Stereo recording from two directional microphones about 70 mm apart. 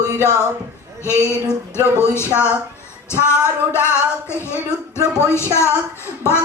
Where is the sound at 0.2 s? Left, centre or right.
Left.